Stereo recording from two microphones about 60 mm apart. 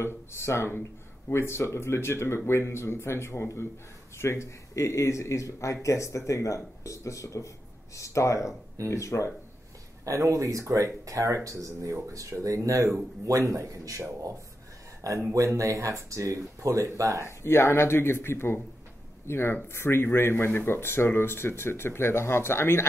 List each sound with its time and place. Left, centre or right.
0.0 s speech: left
10.0 s speech: right
15.3 s speech: right
17.4 s speech: left